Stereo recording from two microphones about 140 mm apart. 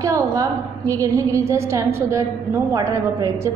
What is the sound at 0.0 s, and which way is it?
A woman's voice, 20° right (ahead or behind).